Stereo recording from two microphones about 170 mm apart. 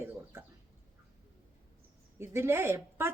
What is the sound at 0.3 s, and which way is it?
Bird, 15° right (ahead or behind).